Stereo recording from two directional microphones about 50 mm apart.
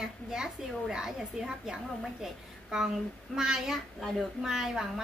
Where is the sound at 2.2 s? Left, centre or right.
Centre.